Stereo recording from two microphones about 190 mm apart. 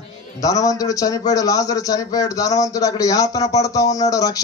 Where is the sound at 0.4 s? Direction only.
20° left (ahead or behind).